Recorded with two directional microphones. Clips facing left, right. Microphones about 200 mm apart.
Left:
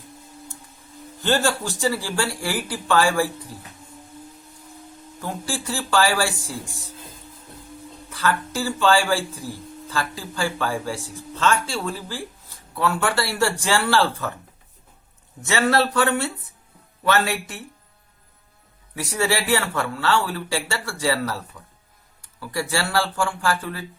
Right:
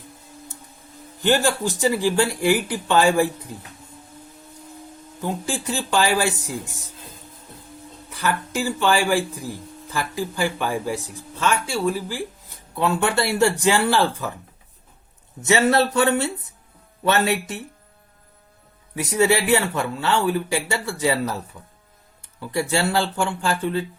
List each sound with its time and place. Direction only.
1.2 s speech: 15° right (ahead or behind)
5.2 s speech: 20° right (ahead or behind)
8.1 s speech: 15° right (ahead or behind)
15.4 s speech: 20° right (ahead or behind)
18.9 s speech: 20° right (ahead or behind)